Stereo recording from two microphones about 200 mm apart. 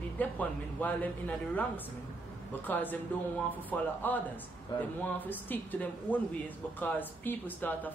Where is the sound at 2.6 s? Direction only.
10° left (ahead or behind).